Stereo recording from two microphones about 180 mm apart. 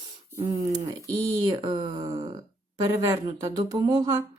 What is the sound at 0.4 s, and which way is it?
Speech, 20° right (ahead or behind).